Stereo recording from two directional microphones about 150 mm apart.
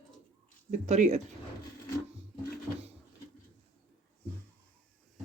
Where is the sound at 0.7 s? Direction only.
50° right (ahead or behind).